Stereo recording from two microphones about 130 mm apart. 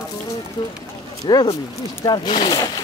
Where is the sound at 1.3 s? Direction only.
35° left (ahead or behind).